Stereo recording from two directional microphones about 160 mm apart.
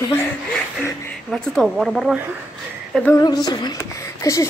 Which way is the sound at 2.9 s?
10° left (ahead or behind).